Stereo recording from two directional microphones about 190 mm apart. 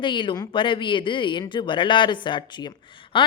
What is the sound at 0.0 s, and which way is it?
Speech, 25° left (ahead or behind).